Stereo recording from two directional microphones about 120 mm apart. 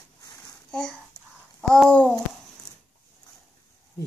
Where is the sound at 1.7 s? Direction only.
10° left (ahead or behind).